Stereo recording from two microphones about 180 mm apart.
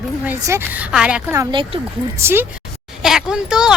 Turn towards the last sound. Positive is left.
turn(degrees=-5)  # may be behind; listen again after turning